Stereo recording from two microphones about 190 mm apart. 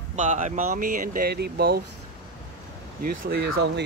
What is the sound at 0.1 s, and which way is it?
Speech, 40° right (ahead or behind).